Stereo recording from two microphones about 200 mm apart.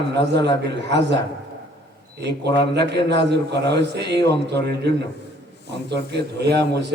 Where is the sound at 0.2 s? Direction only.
60° right (ahead or behind).